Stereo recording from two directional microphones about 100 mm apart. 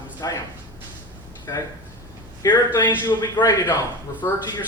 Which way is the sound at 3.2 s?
40° left (ahead or behind).